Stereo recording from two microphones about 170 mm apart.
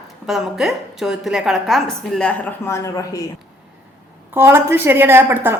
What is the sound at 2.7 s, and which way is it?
Speech, 20° left (ahead or behind).